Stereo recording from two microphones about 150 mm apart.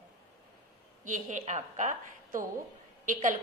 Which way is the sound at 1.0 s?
60° right (ahead or behind).